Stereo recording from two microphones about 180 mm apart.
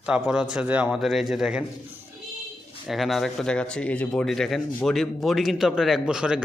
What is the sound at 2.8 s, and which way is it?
A man's voice, centre (ahead or behind).